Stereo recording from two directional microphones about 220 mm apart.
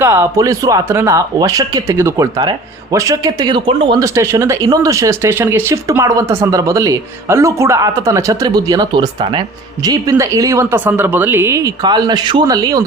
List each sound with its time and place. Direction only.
0.0 s speech: 10° right (ahead or behind)